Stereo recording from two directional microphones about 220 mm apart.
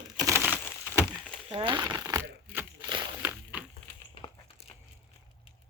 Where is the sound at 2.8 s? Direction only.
20° right (ahead or behind).